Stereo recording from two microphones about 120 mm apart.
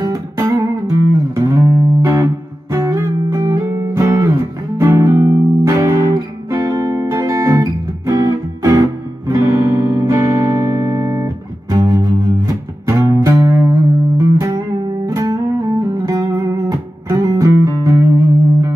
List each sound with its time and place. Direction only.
0.0 s music: 30° right (ahead or behind)